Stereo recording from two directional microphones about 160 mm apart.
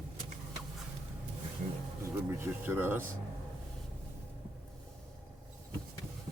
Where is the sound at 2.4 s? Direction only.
15° right (ahead or behind).